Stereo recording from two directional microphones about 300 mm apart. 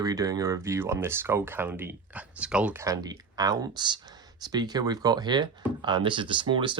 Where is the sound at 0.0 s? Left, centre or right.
Centre.